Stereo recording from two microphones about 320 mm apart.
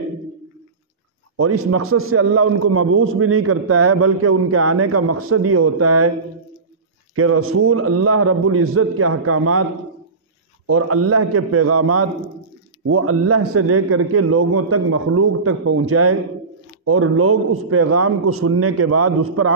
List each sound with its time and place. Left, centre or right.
1.3 s a man's voice: right
7.2 s a man's voice: right
10.7 s a man's voice: right